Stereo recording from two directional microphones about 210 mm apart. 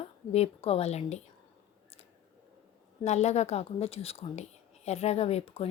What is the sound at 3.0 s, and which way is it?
A woman's voice, 30° left (ahead or behind).